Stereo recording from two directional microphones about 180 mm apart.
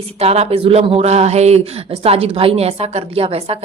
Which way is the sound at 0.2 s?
35° right (ahead or behind).